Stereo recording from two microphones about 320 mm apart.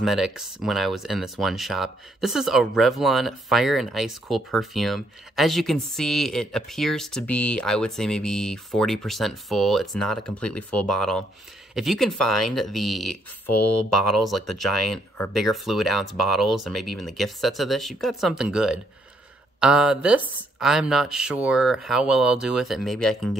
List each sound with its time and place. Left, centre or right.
0.0 s speech: centre
13.5 s speech: left
13.9 s speech: centre